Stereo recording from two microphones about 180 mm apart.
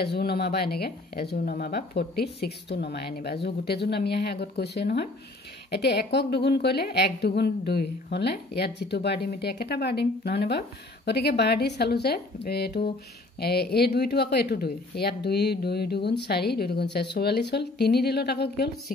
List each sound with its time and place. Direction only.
0.0 s speech: 60° left (ahead or behind)